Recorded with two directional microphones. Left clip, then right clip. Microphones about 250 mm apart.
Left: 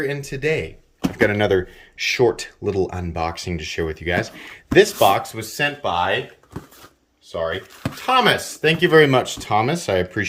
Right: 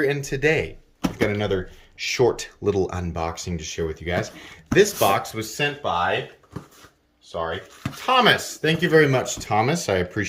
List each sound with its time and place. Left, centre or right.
0.0 s speech: centre
1.2 s speech: centre
2.0 s speech: centre
7.3 s speech: centre